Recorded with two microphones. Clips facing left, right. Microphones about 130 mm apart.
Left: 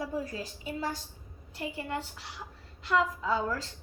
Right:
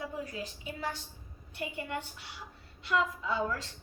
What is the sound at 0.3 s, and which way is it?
A woman's voice, 35° left (ahead or behind).